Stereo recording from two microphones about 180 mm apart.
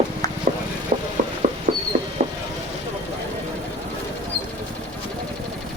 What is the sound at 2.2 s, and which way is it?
Vehicle, 45° right (ahead or behind).